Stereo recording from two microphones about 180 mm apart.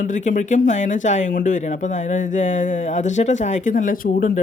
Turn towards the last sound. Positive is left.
turn(degrees=50)  # may be behind; listen again after turning